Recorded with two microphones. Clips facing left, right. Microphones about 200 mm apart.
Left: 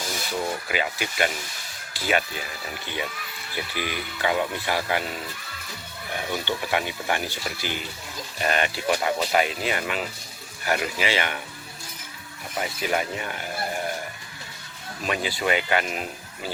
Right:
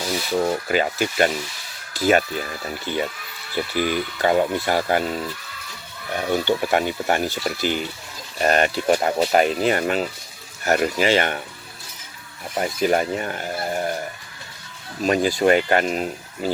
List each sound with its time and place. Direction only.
0.0 s speech: 45° right (ahead or behind)
3.5 s speech: 45° right (ahead or behind)
12.5 s speech: 45° right (ahead or behind)
15.0 s speech: 45° right (ahead or behind)